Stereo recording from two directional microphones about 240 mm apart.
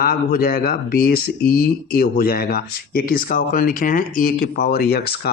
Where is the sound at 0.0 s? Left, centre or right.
Left.